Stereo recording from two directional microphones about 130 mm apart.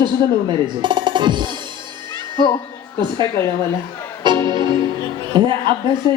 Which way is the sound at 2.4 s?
35° left (ahead or behind).